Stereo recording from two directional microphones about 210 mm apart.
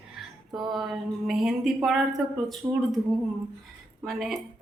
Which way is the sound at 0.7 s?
Centre (ahead or behind).